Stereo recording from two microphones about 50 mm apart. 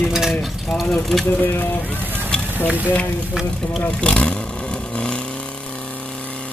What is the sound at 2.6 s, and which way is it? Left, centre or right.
Speech, right.